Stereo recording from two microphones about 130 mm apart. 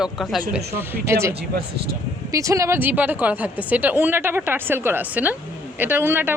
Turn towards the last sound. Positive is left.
turn(degrees=-15)  # may be behind; listen again after turning